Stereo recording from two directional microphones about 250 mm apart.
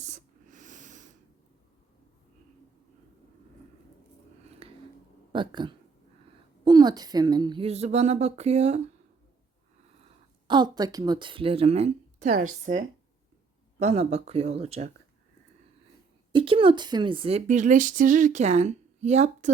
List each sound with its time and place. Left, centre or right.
0.0 s snort: right
4.6 s a sound: right
5.3 s speech: centre
10.4 s speech: centre
13.7 s speech: right
16.3 s speech: right